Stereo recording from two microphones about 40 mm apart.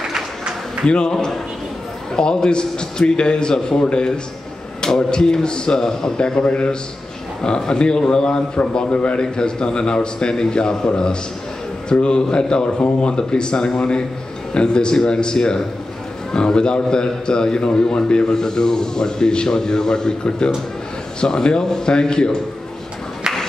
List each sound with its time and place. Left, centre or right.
0.8 s a man's voice: left
2.1 s a man's voice: left
5.1 s a man's voice: centre
11.9 s a man's voice: left